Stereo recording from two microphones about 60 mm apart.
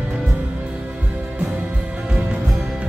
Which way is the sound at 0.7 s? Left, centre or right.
Centre.